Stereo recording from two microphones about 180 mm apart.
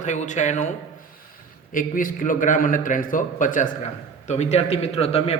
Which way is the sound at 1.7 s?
50° left (ahead or behind).